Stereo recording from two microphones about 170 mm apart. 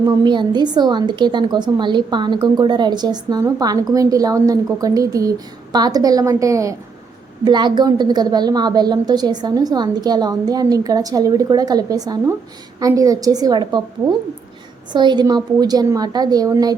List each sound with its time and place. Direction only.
0.0 s a woman's voice: 25° right (ahead or behind)
14.9 s a woman's voice: 25° right (ahead or behind)